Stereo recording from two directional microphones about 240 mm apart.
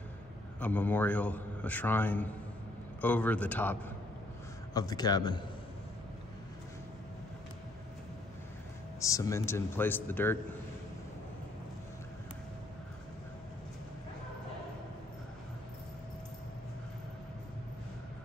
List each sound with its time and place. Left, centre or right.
0.6 s a man's voice: centre
4.7 s a man's voice: centre
9.0 s a man's voice: centre